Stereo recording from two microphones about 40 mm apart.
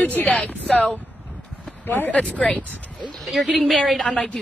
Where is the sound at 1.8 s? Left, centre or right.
Left.